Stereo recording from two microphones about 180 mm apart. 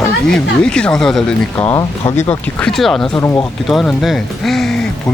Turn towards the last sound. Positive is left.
turn(degrees=0)  # may be behind; listen again after turning